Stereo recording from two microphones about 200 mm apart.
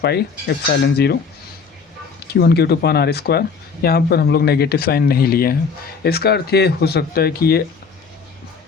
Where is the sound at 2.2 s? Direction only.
55° left (ahead or behind).